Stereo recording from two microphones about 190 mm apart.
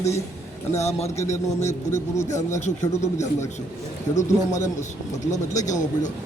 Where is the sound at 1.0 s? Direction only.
15° left (ahead or behind).